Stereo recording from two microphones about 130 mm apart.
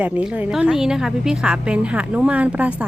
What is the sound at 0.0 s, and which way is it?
A woman's voice, 10° right (ahead or behind).